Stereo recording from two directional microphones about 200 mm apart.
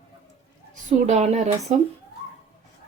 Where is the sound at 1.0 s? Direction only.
35° right (ahead or behind).